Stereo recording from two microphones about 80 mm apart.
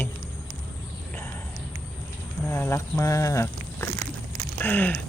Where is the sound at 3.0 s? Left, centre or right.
Left.